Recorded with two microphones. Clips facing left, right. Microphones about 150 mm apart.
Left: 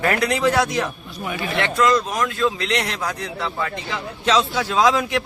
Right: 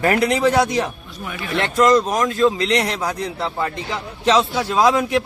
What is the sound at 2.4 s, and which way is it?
Speech, 30° right (ahead or behind).